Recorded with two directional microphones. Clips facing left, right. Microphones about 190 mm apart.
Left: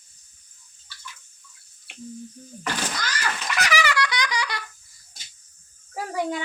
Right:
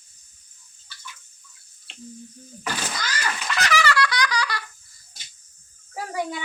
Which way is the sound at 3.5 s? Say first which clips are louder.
Right 2 dB; 15° left (ahead or behind).